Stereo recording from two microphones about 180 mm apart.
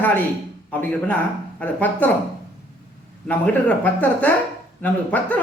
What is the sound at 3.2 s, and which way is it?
A man's voice, 10° left (ahead or behind).